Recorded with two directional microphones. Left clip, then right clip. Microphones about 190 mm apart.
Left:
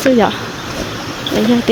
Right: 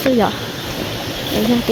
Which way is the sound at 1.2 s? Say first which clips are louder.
Left 4 dB; 40° left (ahead or behind).